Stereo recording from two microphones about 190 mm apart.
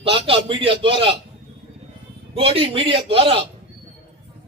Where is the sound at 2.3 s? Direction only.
30° right (ahead or behind).